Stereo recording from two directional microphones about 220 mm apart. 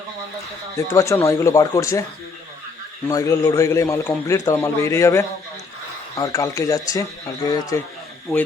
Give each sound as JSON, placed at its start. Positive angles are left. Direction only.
{"t": 0.8, "sound": "a man's voice", "side_deg": 15}
{"t": 3.1, "sound": "a man's voice", "side_deg": 15}